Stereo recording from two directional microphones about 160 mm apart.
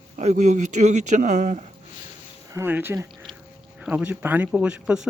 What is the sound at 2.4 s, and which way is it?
Speech, 15° right (ahead or behind).